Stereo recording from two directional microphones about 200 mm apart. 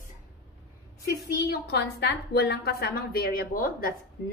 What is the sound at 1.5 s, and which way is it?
A woman's voice, 55° left (ahead or behind).